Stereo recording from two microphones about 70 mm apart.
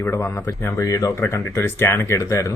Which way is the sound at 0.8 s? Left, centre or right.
Left.